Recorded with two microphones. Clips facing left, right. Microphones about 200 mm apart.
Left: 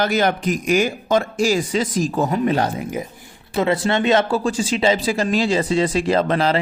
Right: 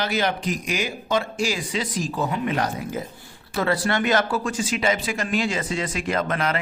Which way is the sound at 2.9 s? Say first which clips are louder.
Left 3 dB; 15° left (ahead or behind).